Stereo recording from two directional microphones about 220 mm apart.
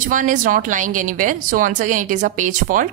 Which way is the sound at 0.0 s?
35° right (ahead or behind).